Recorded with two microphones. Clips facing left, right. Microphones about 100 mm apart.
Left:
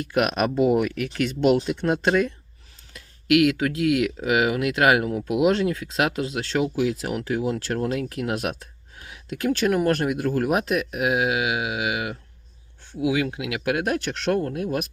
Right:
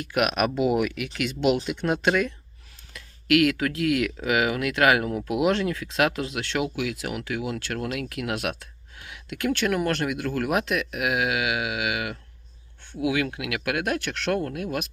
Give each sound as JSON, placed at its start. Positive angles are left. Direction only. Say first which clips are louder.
{"t": 0.0, "sound": "speech", "louder": "left 1 dB", "side_deg": 30}